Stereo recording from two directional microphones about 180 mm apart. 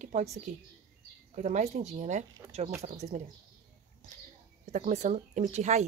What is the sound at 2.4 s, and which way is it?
Speech, 15° right (ahead or behind).